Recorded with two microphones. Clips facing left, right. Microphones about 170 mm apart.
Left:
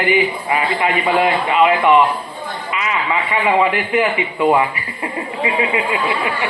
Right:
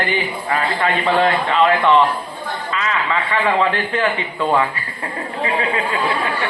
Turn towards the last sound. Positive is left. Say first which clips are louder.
# left 1 dB
turn(degrees=15)  # may be behind; listen again after turning